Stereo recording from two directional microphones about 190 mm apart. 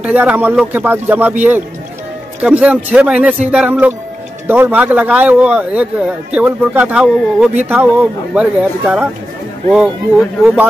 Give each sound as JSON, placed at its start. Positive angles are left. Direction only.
{"t": 0.0, "sound": "speech", "side_deg": -10}
{"t": 10.4, "sound": "speech", "side_deg": -10}